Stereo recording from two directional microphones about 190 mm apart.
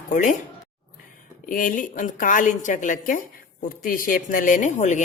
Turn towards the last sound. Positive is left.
turn(degrees=40)  # may be behind; listen again after turning